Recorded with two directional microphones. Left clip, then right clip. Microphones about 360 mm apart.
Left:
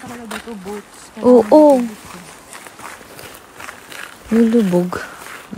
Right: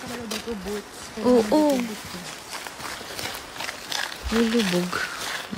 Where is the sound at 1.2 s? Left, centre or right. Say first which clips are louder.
Left 9 dB; centre.